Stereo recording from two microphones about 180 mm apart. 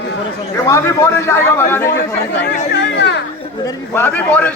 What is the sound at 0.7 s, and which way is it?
A man's voice, 15° left (ahead or behind).